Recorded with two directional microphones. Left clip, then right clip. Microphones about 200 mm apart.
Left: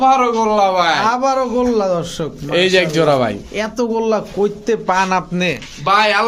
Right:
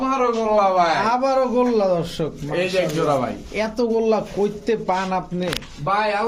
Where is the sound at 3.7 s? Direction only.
20° left (ahead or behind).